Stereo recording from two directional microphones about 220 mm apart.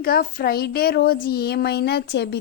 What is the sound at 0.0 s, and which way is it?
Speech, 40° left (ahead or behind).